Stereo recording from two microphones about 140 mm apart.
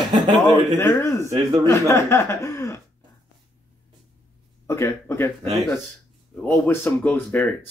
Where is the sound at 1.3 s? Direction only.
30° right (ahead or behind).